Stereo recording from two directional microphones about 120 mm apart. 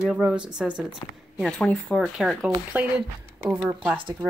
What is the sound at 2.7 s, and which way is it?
Speech, 15° right (ahead or behind).